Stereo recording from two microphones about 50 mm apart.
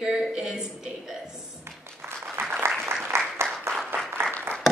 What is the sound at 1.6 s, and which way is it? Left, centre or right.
Music, right.